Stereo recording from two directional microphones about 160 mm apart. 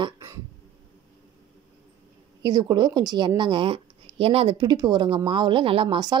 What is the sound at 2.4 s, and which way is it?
Speech, 30° right (ahead or behind).